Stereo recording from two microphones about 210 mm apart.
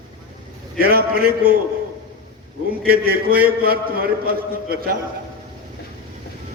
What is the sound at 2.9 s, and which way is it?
A man's voice, 45° right (ahead or behind).